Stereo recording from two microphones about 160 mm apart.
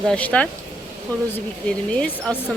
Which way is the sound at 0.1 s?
10° left (ahead or behind).